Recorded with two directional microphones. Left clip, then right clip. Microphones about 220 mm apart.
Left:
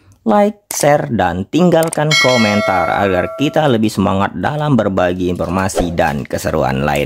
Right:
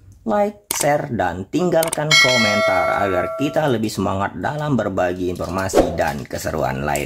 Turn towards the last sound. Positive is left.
turn(degrees=40)  # may be behind; listen again after turning